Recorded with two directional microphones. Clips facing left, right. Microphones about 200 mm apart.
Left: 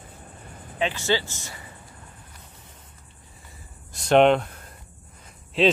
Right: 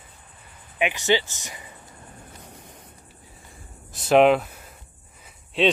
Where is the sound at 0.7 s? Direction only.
15° right (ahead or behind).